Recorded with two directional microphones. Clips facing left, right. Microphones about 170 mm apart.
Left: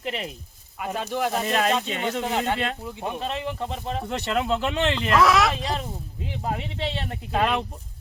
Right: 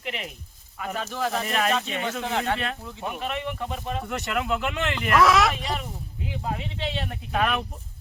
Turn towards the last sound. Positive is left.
turn(degrees=25)  # may be behind; listen again after turning